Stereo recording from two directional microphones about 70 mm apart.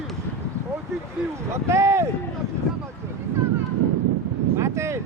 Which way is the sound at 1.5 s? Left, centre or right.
Right.